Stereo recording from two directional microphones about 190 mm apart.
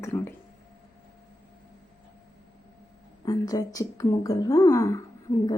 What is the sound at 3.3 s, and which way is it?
A woman's voice, 20° left (ahead or behind).